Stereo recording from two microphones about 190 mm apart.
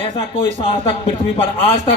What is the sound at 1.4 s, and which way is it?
Speech, 30° left (ahead or behind).